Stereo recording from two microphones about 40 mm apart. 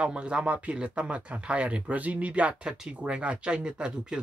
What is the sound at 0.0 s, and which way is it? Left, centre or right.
Speech, right.